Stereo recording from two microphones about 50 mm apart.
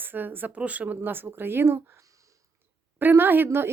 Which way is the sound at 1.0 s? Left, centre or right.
Right.